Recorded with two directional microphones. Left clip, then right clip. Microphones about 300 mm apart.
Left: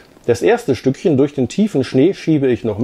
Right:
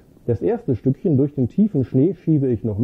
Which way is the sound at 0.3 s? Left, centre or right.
Centre.